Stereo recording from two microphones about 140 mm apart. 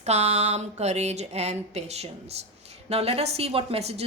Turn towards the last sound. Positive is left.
turn(degrees=-50)  # may be behind; listen again after turning